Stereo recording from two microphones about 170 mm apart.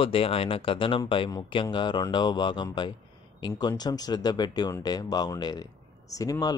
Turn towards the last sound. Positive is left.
turn(degrees=20)  # may be behind; listen again after turning